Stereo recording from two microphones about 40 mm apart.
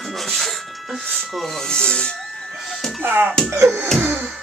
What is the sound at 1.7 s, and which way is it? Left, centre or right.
Speech, left.